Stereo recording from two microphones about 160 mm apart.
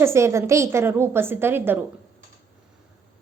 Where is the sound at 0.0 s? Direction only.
15° right (ahead or behind).